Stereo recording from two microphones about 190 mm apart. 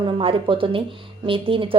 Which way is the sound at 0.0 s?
25° right (ahead or behind).